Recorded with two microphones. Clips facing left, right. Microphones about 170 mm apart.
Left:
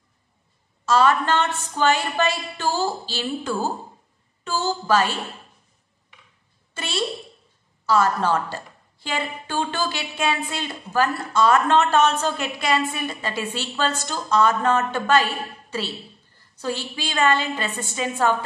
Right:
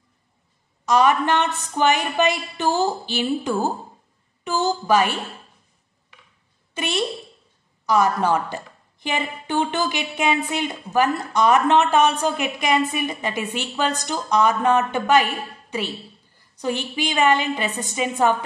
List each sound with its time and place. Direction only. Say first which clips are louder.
0.8 s a woman's voice: right 1 dB; 15° right (ahead or behind)
6.7 s a woman's voice: right 3 dB; 15° right (ahead or behind)